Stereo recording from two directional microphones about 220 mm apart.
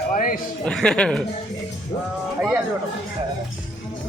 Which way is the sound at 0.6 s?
5° left (ahead or behind).